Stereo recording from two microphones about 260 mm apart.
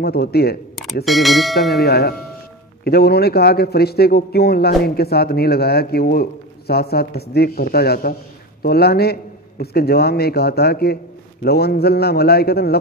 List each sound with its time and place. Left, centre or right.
0.0 s a man's voice: left
1.0 s speech: centre
1.7 s a man's voice: left